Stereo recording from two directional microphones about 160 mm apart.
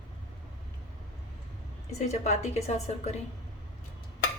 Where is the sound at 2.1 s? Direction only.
45° left (ahead or behind).